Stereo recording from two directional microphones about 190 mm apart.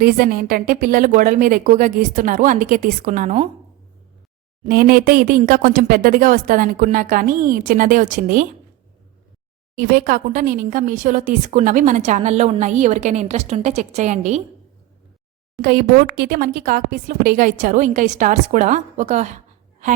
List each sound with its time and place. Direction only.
0.0 s a woman's voice: 50° right (ahead or behind)
4.6 s a woman's voice: 50° right (ahead or behind)
9.7 s speech: 50° right (ahead or behind)
15.6 s a woman's voice: 50° right (ahead or behind)